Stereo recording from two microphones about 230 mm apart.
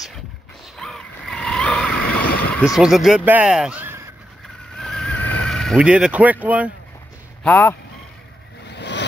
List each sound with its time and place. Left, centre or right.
0.7 s a sound: centre
2.2 s vehicle: left
2.8 s speech: centre
4.7 s boat: centre
7.4 s speech: centre
8.6 s vehicle: left